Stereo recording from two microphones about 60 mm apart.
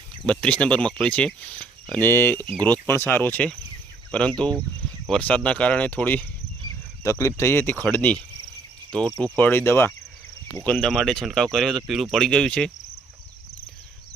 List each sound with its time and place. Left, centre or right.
0.3 s speech: centre
2.0 s speech: left
4.1 s speech: centre
7.0 s speech: left
10.7 s speech: centre
11.9 s speech: centre
12.1 s speech: centre